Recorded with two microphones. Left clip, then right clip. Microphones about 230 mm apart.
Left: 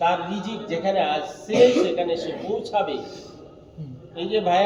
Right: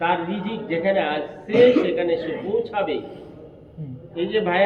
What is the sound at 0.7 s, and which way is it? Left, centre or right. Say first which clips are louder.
Speech: right 1 dB; left.